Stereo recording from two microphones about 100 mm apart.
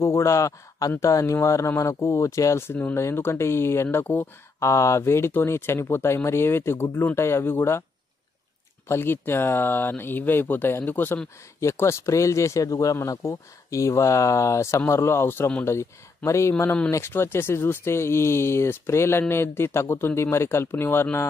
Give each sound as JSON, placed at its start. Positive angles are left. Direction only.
{"t": 0.0, "sound": "speech", "side_deg": 30}
{"t": 8.8, "sound": "speech", "side_deg": 25}